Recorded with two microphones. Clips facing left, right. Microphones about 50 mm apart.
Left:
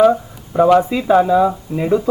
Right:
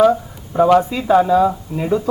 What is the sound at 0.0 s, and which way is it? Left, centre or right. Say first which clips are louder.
A woman's voice: left 1 dB; centre.